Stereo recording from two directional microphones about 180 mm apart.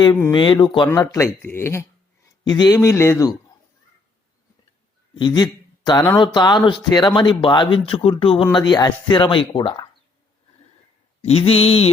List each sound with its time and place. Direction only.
0.0 s speech: 20° left (ahead or behind)
5.1 s a man's voice: 25° left (ahead or behind)
8.2 s mantra: 30° left (ahead or behind)
8.7 s speech: 25° left (ahead or behind)
11.2 s mantra: 35° left (ahead or behind)